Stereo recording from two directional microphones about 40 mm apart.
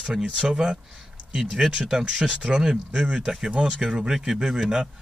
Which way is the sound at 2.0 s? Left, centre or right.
Right.